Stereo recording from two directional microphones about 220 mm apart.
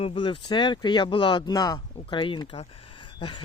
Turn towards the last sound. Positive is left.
turn(degrees=20)  # may be behind; listen again after turning